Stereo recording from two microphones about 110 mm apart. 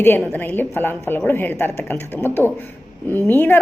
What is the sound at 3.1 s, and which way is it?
Speech, 15° left (ahead or behind).